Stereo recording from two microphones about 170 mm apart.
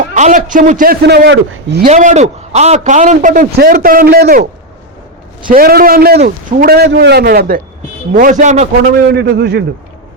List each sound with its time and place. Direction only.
0.1 s a man's voice: 45° right (ahead or behind)
1.0 s a man's voice: 75° right (ahead or behind)
1.9 s a man's voice: 45° right (ahead or behind); by 4.4 s 60° right (ahead or behind)
5.5 s a man's voice: 60° right (ahead or behind)
8.1 s a man's voice: 50° right (ahead or behind)
9.1 s a man's voice: 80° right